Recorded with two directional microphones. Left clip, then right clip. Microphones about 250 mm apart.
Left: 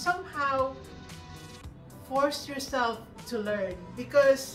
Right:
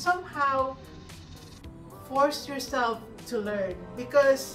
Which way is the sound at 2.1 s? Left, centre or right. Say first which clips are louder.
Right 2 dB; centre.